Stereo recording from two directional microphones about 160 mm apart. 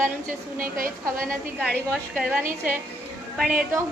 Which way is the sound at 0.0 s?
60° right (ahead or behind).